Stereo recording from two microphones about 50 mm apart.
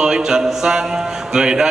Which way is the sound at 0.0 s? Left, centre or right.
Centre.